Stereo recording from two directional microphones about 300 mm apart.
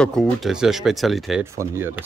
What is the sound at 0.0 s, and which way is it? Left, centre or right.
Speech, centre.